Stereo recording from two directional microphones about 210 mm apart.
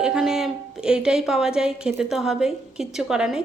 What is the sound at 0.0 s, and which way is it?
A woman's voice, 5° right (ahead or behind).